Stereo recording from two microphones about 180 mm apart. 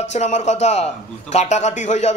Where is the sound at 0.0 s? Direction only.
40° left (ahead or behind).